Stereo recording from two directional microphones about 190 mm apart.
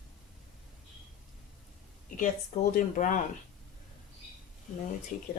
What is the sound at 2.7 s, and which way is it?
Speech, 45° left (ahead or behind).